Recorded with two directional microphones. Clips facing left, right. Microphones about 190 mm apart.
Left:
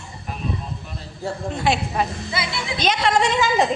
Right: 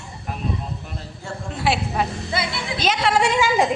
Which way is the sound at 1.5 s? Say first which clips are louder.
Right 1 dB; 5° right (ahead or behind).